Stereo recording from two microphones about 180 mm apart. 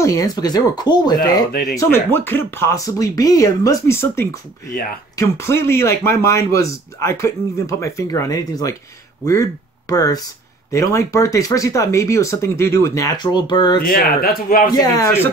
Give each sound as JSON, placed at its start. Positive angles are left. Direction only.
{"t": 0.0, "sound": "speech", "side_deg": 20}
{"t": 1.5, "sound": "speech", "side_deg": 45}
{"t": 1.8, "sound": "speech", "side_deg": 15}
{"t": 13.7, "sound": "speech", "side_deg": 55}
{"t": 14.7, "sound": "speech", "side_deg": 20}